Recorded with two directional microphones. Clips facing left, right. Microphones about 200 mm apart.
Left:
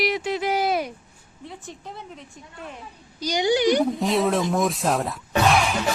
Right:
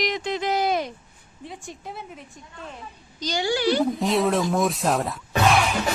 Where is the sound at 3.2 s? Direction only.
15° left (ahead or behind).